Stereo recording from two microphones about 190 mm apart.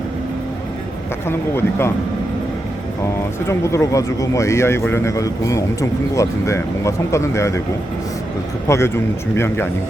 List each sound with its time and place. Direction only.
1.3 s speech: 10° left (ahead or behind)
3.4 s speech: 15° left (ahead or behind)
8.6 s speech: 15° left (ahead or behind)